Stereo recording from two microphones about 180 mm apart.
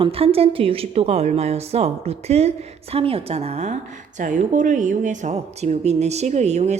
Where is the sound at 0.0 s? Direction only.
30° right (ahead or behind).